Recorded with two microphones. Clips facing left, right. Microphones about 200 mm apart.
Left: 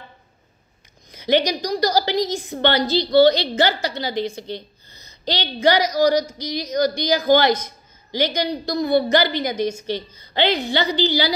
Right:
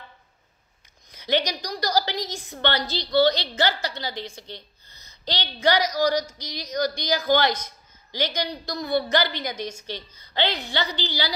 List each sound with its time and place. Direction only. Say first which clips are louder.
1.1 s a woman's voice: left 6 dB; 10° left (ahead or behind)
2.5 s a woman's voice: left 7 dB; 20° left (ahead or behind)